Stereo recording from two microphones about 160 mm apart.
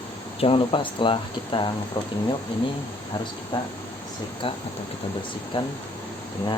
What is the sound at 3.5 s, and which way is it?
Speech, 30° left (ahead or behind).